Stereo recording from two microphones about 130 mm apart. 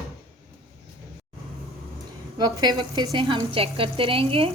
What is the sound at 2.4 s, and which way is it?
A woman's voice, 30° right (ahead or behind).